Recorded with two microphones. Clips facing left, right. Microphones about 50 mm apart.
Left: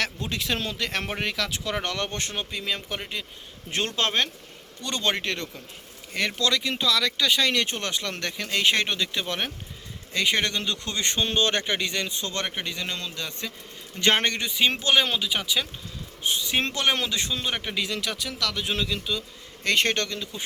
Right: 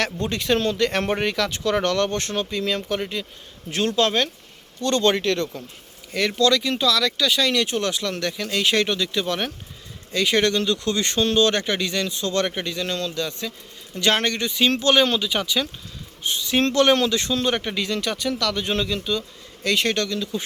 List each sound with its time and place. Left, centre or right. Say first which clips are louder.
0.0 s speech: right 4 dB; centre
3.7 s speech: right 6 dB; left
4.8 s speech: right 7 dB; centre
12.5 s speech: right 5 dB; centre
14.4 s speech: right 4 dB; centre
19.6 s speech: right 2 dB; left